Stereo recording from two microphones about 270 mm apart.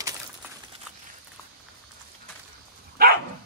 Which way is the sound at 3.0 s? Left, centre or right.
Right.